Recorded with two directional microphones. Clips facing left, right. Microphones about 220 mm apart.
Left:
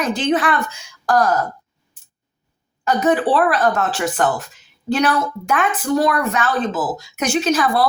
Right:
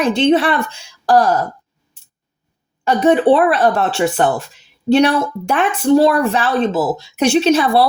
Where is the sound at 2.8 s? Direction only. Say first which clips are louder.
Right 5 dB; 25° right (ahead or behind).